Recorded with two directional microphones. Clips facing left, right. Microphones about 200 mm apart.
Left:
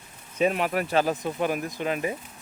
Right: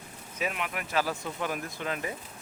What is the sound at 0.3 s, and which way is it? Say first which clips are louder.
Speech: left 10 dB; 35° left (ahead or behind).